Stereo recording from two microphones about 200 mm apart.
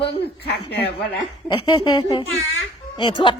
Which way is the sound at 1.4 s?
25° left (ahead or behind).